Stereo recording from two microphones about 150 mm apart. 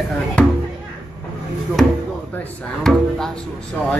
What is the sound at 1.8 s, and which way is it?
Speech, centre (ahead or behind).